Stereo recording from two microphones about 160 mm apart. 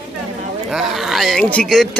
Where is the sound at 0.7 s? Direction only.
5° right (ahead or behind).